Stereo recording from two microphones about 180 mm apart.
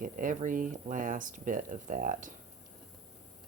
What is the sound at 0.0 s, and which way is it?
Speech, 45° right (ahead or behind).